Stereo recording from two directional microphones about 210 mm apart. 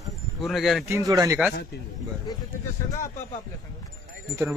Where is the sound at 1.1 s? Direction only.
15° right (ahead or behind).